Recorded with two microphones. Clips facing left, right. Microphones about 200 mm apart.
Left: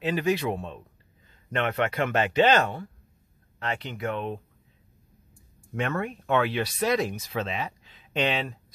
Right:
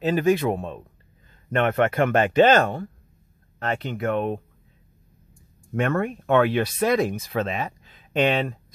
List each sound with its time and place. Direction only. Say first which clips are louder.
0.0 s speech: right 5 dB; 45° right (ahead or behind)
5.8 s speech: right 6 dB; 50° right (ahead or behind)